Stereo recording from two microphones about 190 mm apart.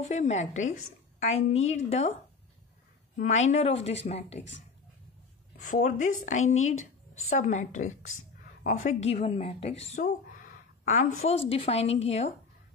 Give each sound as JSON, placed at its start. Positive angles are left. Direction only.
{"t": 0.1, "sound": "speech", "side_deg": 35}
{"t": 3.2, "sound": "speech", "side_deg": 40}
{"t": 5.6, "sound": "speech", "side_deg": 40}